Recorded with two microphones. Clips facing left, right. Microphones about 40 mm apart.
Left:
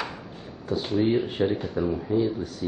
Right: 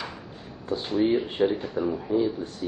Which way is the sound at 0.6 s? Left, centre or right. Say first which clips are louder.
Left 1 dB; right.